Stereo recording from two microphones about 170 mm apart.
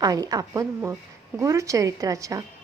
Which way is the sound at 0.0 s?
20° right (ahead or behind).